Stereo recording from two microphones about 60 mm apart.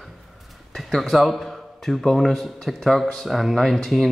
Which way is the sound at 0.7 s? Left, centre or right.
Centre.